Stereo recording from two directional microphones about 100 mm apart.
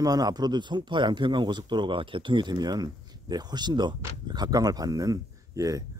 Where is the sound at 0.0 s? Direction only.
40° right (ahead or behind).